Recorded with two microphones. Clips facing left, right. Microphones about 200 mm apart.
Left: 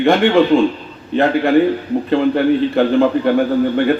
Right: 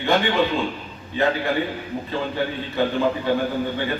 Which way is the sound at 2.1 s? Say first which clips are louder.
Left 12 dB; 65° left (ahead or behind).